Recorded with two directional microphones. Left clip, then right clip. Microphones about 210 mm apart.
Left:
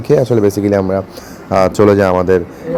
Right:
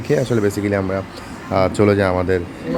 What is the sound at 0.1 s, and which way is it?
Speech, 25° left (ahead or behind).